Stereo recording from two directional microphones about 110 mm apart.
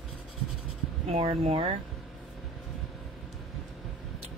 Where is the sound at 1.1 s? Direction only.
65° right (ahead or behind).